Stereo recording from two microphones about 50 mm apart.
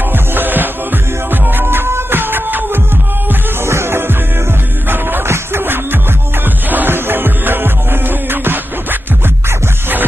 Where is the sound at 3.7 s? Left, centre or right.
Right.